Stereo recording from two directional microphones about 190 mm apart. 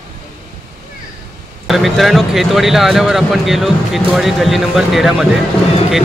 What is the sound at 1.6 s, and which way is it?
Speech, centre (ahead or behind).